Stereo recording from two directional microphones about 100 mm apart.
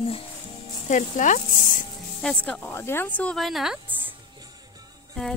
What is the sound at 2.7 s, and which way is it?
Speech, 25° left (ahead or behind).